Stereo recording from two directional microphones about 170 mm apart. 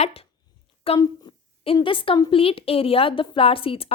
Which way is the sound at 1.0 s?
25° left (ahead or behind).